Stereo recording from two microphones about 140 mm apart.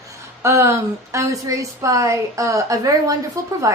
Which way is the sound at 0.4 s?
20° right (ahead or behind).